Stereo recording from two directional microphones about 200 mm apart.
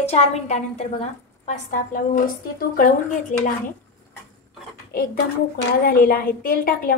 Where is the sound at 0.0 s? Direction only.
30° left (ahead or behind).